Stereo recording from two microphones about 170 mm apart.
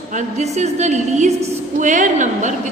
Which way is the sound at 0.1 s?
45° right (ahead or behind).